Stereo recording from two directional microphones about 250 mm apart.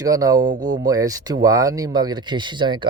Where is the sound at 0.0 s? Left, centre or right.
Centre.